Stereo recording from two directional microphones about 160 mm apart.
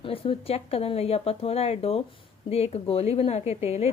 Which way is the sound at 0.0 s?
35° left (ahead or behind).